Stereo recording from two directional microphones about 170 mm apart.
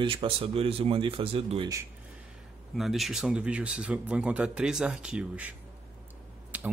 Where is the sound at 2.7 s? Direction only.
Centre (ahead or behind).